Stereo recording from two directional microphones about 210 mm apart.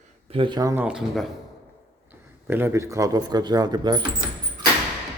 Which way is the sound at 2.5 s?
10° right (ahead or behind).